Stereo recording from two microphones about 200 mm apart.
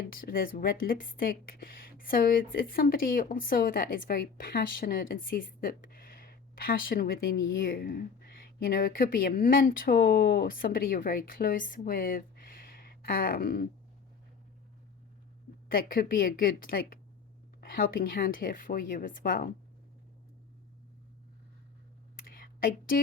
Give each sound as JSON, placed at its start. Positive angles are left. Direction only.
{"t": 0.0, "sound": "a woman's voice", "side_deg": 45}
{"t": 15.7, "sound": "a woman's voice", "side_deg": 45}
{"t": 22.3, "sound": "a sound", "side_deg": 45}